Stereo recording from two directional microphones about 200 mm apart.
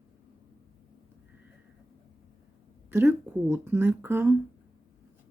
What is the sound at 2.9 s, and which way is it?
Speech, 10° right (ahead or behind).